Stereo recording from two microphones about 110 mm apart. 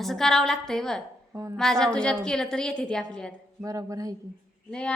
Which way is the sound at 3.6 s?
30° right (ahead or behind).